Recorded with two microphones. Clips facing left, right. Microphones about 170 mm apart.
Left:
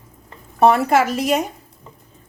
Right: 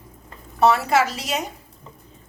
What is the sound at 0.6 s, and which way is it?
Speech, 50° left (ahead or behind).